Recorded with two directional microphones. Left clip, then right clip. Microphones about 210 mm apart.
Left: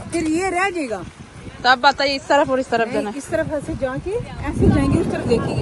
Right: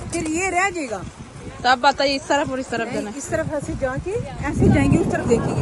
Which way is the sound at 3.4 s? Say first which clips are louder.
Left 1 dB; 25° left (ahead or behind).